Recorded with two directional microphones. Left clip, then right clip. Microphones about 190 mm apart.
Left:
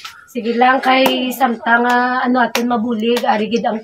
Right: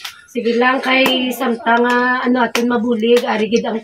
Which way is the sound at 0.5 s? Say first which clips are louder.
Left 3 dB; 10° left (ahead or behind).